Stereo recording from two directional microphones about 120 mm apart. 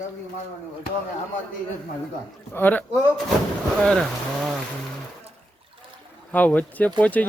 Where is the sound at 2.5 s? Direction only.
15° left (ahead or behind).